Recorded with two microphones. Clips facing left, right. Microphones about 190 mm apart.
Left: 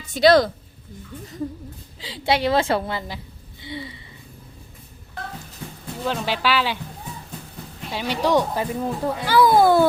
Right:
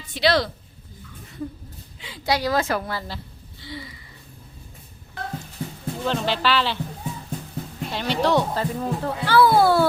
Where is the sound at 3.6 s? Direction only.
25° left (ahead or behind).